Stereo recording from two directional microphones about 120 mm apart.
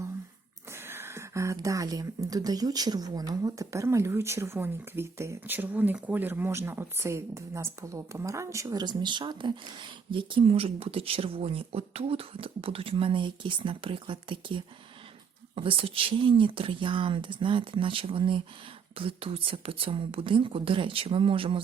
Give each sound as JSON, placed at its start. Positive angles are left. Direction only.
{"t": 0.7, "sound": "speech", "side_deg": -20}